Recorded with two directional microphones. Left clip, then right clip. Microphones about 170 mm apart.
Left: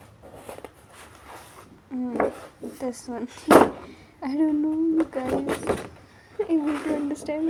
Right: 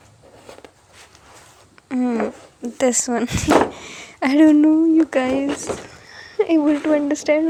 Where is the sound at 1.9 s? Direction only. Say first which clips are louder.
Right 4 dB; 30° right (ahead or behind).